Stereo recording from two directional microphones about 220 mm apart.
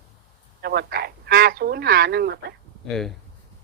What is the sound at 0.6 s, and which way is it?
Speech, 45° right (ahead or behind).